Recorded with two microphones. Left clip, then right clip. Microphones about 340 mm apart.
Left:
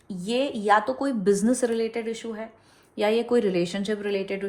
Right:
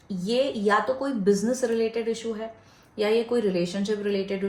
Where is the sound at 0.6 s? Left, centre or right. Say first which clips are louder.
Left 2 dB; left.